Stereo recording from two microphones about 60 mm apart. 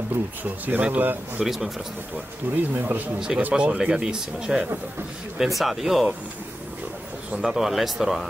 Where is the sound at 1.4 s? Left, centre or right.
Centre.